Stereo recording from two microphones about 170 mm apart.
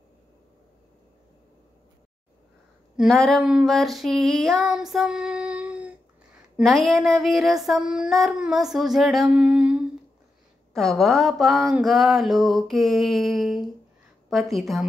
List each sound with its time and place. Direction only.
3.0 s female singing: centre (ahead or behind)